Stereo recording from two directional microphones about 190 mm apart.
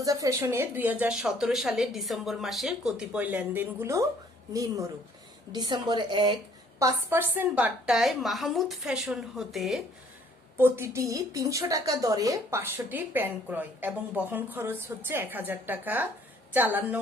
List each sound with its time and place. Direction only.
0.0 s a woman's voice: 20° right (ahead or behind); by 9.8 s centre (ahead or behind)
10.6 s a woman's voice: 15° right (ahead or behind)